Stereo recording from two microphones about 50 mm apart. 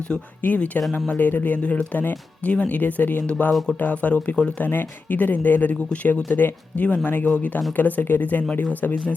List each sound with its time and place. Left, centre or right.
0.1 s speech: centre
0.4 s speech: left
1.5 s speech: left
2.0 s speech: left
4.6 s speech: left
8.8 s speech: left